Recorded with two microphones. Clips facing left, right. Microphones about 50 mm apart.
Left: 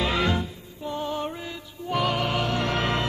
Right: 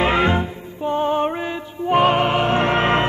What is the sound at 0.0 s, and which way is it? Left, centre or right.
Music, right.